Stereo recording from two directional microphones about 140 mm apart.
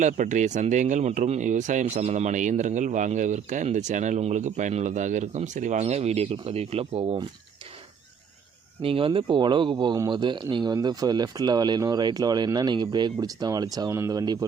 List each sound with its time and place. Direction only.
0.0 s speech: 60° right (ahead or behind); by 7.2 s 45° right (ahead or behind)
8.8 s speech: 40° right (ahead or behind)